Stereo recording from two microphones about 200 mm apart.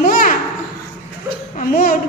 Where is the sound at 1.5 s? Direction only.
45° left (ahead or behind).